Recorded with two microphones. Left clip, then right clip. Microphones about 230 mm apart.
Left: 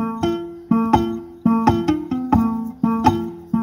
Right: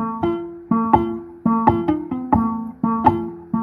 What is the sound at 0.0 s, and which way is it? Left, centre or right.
Music, left.